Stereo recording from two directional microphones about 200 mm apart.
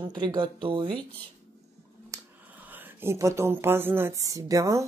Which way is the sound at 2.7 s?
10° right (ahead or behind).